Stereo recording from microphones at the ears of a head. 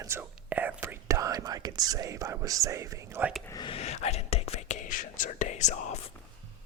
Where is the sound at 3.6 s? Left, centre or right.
Left.